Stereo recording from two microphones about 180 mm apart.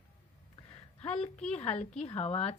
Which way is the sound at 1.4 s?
35° left (ahead or behind).